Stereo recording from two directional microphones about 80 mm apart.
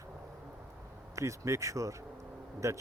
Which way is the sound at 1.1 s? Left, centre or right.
Right.